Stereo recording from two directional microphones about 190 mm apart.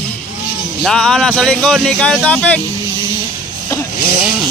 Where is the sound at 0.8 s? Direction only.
5° left (ahead or behind).